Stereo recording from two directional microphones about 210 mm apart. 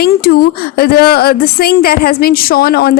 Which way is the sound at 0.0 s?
45° left (ahead or behind).